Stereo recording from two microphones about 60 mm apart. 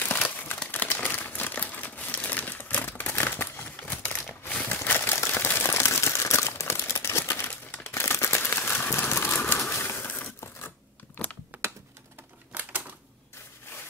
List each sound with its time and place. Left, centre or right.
0.0 s crumpling: left
3.8 s typewriter: left
7.8 s a sound: left
9.6 s bird: left
11.5 s typing: right